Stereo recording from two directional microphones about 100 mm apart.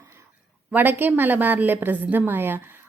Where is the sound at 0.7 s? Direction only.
20° right (ahead or behind).